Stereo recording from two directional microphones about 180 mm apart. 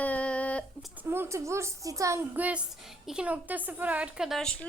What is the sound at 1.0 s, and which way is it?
A woman's voice, 15° right (ahead or behind).